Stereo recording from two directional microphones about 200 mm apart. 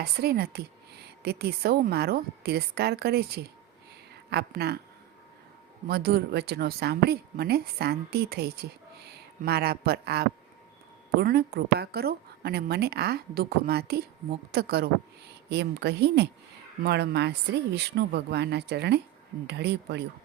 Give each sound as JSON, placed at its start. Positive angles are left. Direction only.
{"t": 0.0, "sound": "a woman's voice", "side_deg": -50}
{"t": 5.9, "sound": "a woman's voice", "side_deg": -50}